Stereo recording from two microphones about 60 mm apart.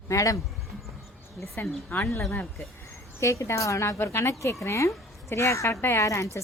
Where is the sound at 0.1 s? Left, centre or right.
Left.